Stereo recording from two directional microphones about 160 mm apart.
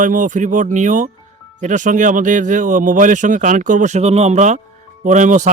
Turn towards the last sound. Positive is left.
turn(degrees=-50)  # may be behind; listen again after turning